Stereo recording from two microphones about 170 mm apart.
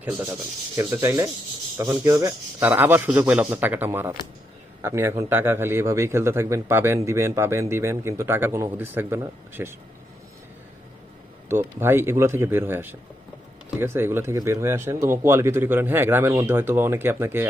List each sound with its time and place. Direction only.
0.0 s a man's voice: 10° right (ahead or behind)
11.4 s a man's voice: 15° right (ahead or behind)